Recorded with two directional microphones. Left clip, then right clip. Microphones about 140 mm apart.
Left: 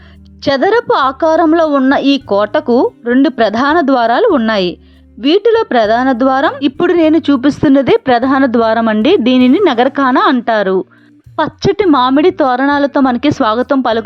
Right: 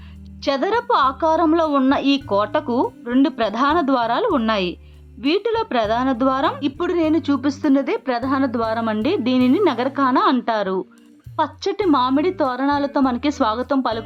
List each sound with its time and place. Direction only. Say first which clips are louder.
0.4 s a woman's voice: left 9 dB; 35° left (ahead or behind)